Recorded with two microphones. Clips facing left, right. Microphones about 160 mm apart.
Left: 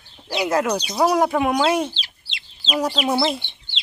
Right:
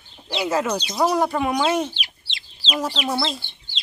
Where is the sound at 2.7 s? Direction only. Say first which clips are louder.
Left 4 dB; 20° left (ahead or behind).